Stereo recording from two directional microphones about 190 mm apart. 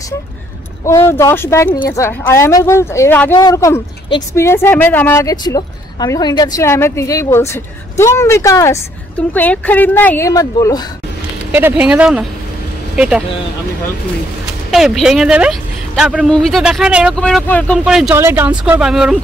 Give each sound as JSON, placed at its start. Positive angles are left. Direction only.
{"t": 0.8, "sound": "speech", "side_deg": 15}
{"t": 11.5, "sound": "speech", "side_deg": -10}
{"t": 14.7, "sound": "speech", "side_deg": 0}